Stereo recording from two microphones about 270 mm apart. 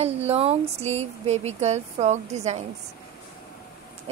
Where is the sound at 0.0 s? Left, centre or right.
Right.